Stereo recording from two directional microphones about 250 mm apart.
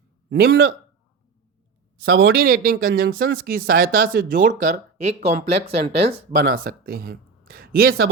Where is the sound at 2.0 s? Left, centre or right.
Right.